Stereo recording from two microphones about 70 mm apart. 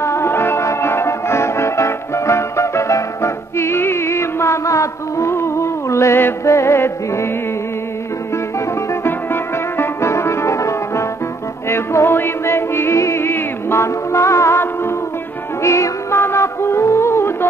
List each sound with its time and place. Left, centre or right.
0.0 s music: left
9.0 s music: left